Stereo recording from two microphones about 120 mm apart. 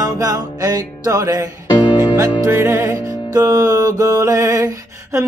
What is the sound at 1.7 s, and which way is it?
Music, 35° left (ahead or behind).